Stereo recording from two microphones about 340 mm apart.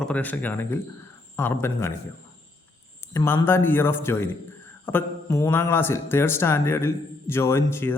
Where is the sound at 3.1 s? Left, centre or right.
Centre.